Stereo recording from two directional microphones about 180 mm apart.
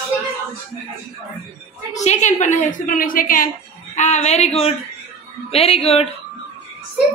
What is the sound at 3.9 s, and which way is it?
Speech, 40° left (ahead or behind).